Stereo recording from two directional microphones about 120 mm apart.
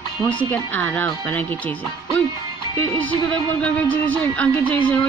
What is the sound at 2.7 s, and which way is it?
Speech, 15° left (ahead or behind).